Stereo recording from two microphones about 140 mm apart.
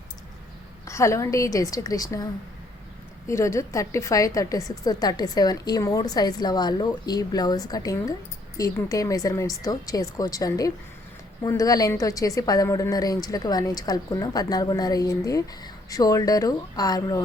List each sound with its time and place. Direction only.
0.9 s a woman's voice: 20° left (ahead or behind)
3.2 s a woman's voice: 20° left (ahead or behind)